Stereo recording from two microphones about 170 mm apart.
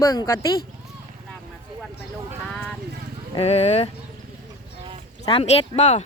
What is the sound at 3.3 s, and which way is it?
Speech, 40° left (ahead or behind).